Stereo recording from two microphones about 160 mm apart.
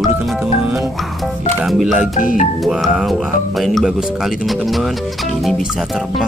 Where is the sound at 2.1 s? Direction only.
55° left (ahead or behind).